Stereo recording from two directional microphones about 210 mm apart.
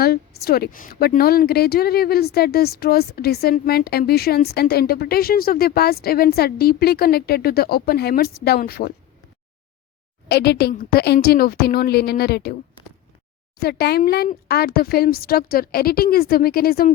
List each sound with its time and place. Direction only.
0.0 s a woman's voice: 45° left (ahead or behind)
10.2 s a woman's voice: 50° left (ahead or behind)
13.6 s a woman's voice: 50° left (ahead or behind)